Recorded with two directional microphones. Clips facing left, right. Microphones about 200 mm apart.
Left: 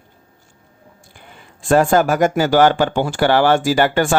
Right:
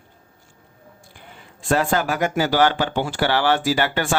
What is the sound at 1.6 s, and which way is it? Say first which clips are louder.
Speech: left 7 dB; 45° left (ahead or behind).